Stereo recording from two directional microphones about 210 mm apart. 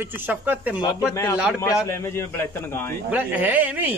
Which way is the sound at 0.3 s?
10° right (ahead or behind).